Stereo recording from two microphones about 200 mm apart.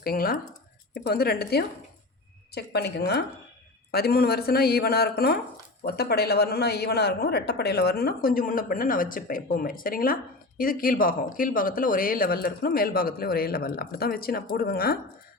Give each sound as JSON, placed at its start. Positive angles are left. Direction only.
{"t": 0.0, "sound": "speech", "side_deg": 45}